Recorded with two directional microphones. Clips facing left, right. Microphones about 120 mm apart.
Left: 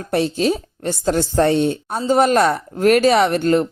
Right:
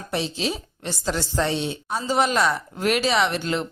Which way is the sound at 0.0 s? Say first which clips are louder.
Left 8 dB; 55° left (ahead or behind).